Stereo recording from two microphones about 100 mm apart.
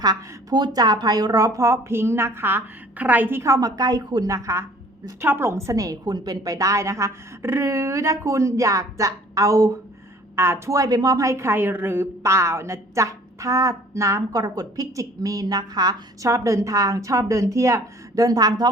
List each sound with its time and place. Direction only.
0.0 s a woman's voice: 45° right (ahead or behind)